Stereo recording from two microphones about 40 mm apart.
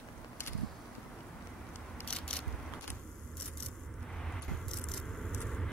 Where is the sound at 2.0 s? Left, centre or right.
Left.